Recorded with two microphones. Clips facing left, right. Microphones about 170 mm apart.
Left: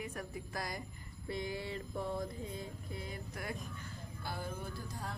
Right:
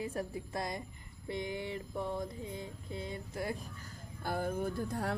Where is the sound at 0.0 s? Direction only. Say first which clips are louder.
Right 5 dB; 30° right (ahead or behind).